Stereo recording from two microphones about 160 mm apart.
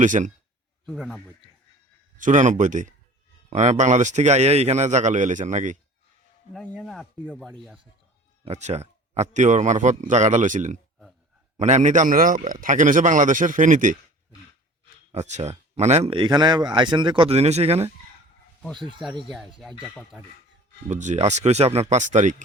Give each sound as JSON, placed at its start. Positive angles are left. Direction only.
{"t": 0.0, "sound": "a man's voice", "side_deg": -50}
{"t": 0.9, "sound": "speech", "side_deg": 0}
{"t": 2.1, "sound": "a man's voice", "side_deg": -55}
{"t": 6.5, "sound": "speech", "side_deg": 5}
{"t": 8.4, "sound": "a man's voice", "side_deg": -45}
{"t": 15.1, "sound": "speech", "side_deg": -45}
{"t": 19.3, "sound": "speech", "side_deg": 0}
{"t": 20.8, "sound": "a man's voice", "side_deg": -50}